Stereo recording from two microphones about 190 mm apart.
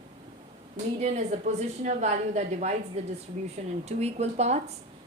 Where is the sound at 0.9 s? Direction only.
35° right (ahead or behind).